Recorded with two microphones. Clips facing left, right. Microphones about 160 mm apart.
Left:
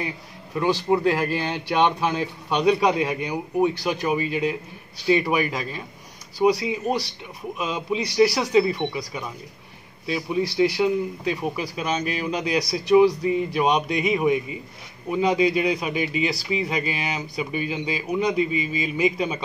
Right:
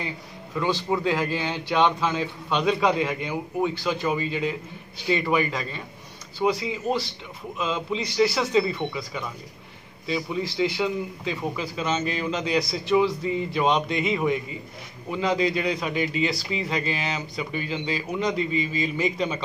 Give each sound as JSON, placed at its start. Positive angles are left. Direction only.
{"t": 0.9, "sound": "speech", "side_deg": 15}